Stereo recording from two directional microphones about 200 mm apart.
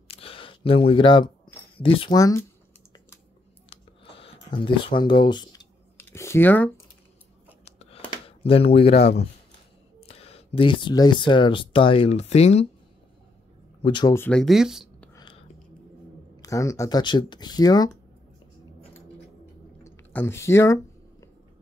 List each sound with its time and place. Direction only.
0.1 s a sound: 30° left (ahead or behind)
1.8 s speech: 25° left (ahead or behind)
3.7 s a sound: 25° left (ahead or behind); by 6.7 s 10° left (ahead or behind)
7.6 s a sound: 30° left (ahead or behind)
8.3 s speech: 30° left (ahead or behind)
8.9 s speech: 55° left (ahead or behind)
10.0 s speech: 30° left (ahead or behind)
13.8 s speech: 25° left (ahead or behind)
14.1 s speech: 5° left (ahead or behind)
15.1 s whispering: 25° left (ahead or behind)
16.3 s speech: 15° left (ahead or behind)
19.8 s a sound: 10° left (ahead or behind)